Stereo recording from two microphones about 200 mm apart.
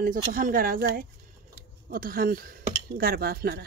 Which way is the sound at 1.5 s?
45° right (ahead or behind).